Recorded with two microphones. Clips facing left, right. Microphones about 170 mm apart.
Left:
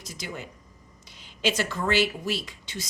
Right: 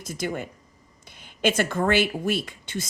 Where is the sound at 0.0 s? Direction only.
50° right (ahead or behind).